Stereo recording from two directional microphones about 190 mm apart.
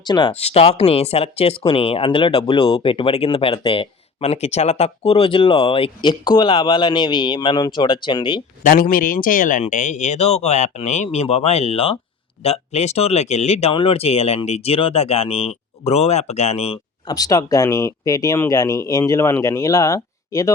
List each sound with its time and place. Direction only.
0.0 s speech: 25° left (ahead or behind)
8.6 s speech: 50° left (ahead or behind); by 16.8 s 35° left (ahead or behind)
17.1 s speech: 20° left (ahead or behind)